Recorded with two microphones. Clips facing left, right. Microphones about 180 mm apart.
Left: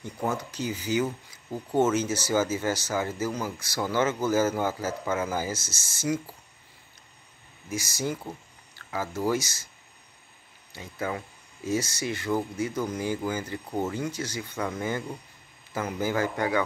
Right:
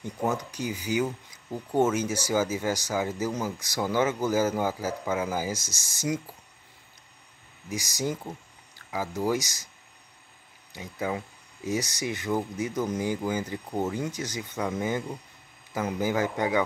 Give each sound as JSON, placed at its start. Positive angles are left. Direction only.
{"t": 0.0, "sound": "a man's voice", "side_deg": -15}
{"t": 7.7, "sound": "a man's voice", "side_deg": -15}
{"t": 10.7, "sound": "a man's voice", "side_deg": -15}